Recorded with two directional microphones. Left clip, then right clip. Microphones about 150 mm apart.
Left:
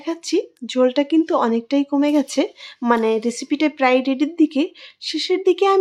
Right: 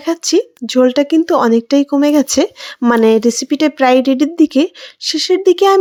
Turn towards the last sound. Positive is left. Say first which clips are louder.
# right 6 dB
turn(degrees=-45)  # may be behind; listen again after turning